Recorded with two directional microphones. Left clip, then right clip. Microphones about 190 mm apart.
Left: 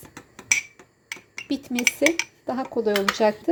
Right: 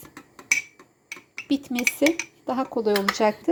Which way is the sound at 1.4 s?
5° right (ahead or behind).